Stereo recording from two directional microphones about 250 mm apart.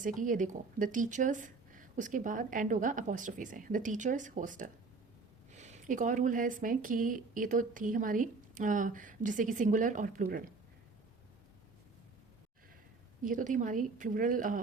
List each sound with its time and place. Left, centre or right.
0.0 s speech: right
13.2 s speech: right